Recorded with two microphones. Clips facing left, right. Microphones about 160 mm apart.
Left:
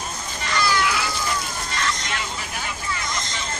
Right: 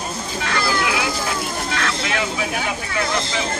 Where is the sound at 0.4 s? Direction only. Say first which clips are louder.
Right 1 dB; 60° right (ahead or behind).